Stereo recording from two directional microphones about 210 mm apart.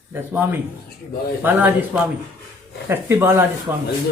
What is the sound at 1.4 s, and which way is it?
Speech, 10° right (ahead or behind).